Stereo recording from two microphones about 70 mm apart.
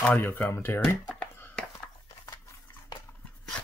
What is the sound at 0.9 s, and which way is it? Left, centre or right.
Speech, centre.